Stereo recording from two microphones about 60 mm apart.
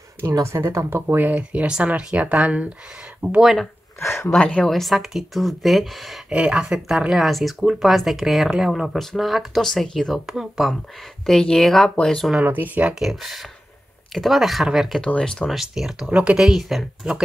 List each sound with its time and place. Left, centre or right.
0.7 s speech: right
1.0 s speech: right
4.0 s a sound: left
4.4 s speech: centre
4.6 s speech: centre
6.3 s speech: centre
6.6 s speech: centre
11.2 s speech: centre
12.4 s speech: right
13.0 s speech: centre
15.0 s speech: centre
15.4 s speech: centre
16.1 s speech: right
16.3 s speech: centre